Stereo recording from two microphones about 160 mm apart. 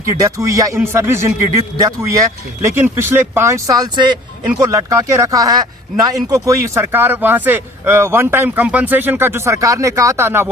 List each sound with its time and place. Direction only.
0.2 s a man's voice: 20° right (ahead or behind)